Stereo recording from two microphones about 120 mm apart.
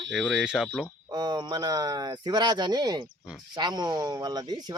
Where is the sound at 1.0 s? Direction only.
35° right (ahead or behind).